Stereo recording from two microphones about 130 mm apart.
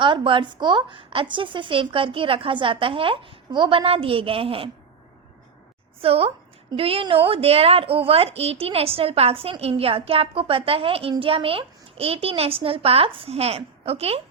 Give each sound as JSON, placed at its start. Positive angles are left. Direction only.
{"t": 0.0, "sound": "a woman's voice", "side_deg": -40}
{"t": 6.0, "sound": "a woman's voice", "side_deg": -45}